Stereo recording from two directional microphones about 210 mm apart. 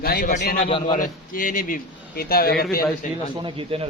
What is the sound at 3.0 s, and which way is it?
Speech, 35° left (ahead or behind).